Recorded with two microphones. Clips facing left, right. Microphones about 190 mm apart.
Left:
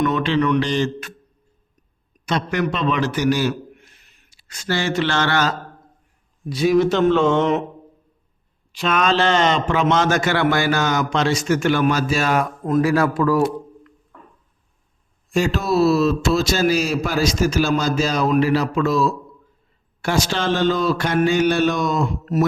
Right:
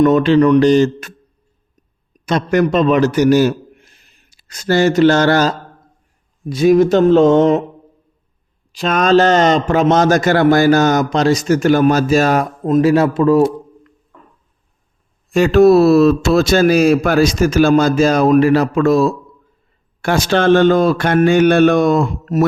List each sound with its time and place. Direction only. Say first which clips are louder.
0.0 s a man's voice: right 9 dB; 45° right (ahead or behind)
2.2 s a man's voice: right 7 dB; 45° right (ahead or behind)
3.8 s a sound: right 1 dB; 35° right (ahead or behind)
6.5 s a man's voice: right 6 dB; 50° right (ahead or behind)
8.7 s a man's voice: right 7 dB; 40° right (ahead or behind)
12.6 s a man's voice: right 6 dB; 25° right (ahead or behind)
15.3 s speech: right 11 dB; 60° right (ahead or behind)